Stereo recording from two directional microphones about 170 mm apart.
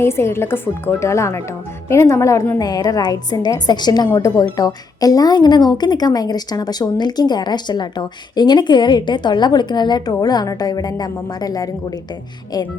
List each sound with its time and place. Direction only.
0.0 s speech: 15° left (ahead or behind)